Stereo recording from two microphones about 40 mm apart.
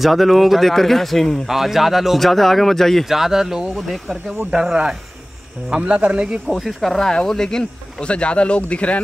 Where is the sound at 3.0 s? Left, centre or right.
Centre.